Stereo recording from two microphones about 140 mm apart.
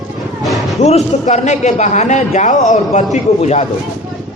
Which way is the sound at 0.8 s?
50° left (ahead or behind).